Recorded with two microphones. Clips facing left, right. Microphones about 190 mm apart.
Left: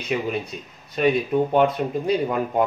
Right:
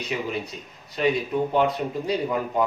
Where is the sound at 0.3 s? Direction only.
55° left (ahead or behind).